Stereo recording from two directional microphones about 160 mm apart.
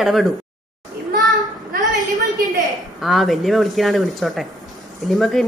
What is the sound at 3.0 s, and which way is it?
A woman's voice, centre (ahead or behind).